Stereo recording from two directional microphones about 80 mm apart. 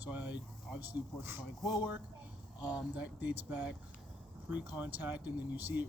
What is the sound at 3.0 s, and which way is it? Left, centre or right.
Speech, centre.